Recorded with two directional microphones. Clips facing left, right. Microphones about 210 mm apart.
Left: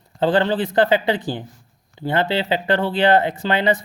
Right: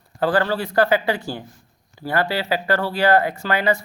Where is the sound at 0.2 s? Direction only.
20° left (ahead or behind).